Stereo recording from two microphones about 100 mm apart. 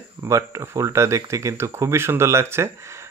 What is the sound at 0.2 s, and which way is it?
Speech, 30° right (ahead or behind).